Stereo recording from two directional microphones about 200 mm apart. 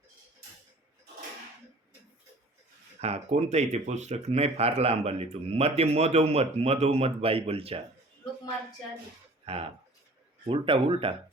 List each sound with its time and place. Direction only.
3.0 s speech: 30° right (ahead or behind)
9.5 s speech: 30° right (ahead or behind)